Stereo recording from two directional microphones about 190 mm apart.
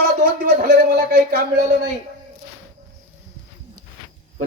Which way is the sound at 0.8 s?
55° right (ahead or behind).